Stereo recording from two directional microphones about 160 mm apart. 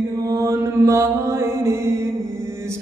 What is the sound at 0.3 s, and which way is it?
Mantra, 20° right (ahead or behind).